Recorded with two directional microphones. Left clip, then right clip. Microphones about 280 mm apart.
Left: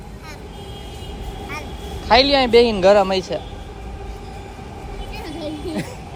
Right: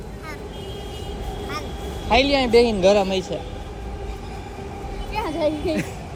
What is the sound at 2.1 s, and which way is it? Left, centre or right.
Speech, centre.